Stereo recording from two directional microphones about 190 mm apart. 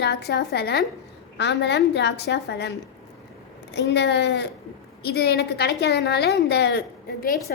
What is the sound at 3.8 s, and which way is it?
A woman's voice, 65° left (ahead or behind).